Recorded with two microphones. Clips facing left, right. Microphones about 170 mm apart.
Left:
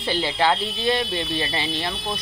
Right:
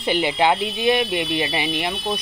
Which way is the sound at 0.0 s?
20° right (ahead or behind).